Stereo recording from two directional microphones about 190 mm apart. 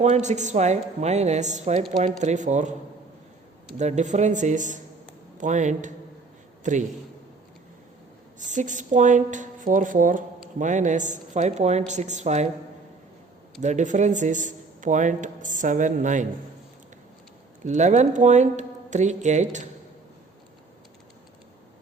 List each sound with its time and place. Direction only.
0.0 s speech: 40° right (ahead or behind)
3.8 s a man's voice: 40° right (ahead or behind)
8.4 s speech: 40° right (ahead or behind)
13.6 s speech: 40° right (ahead or behind)
17.6 s speech: 40° right (ahead or behind)